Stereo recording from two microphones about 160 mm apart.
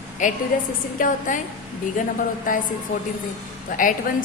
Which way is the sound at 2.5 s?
55° left (ahead or behind).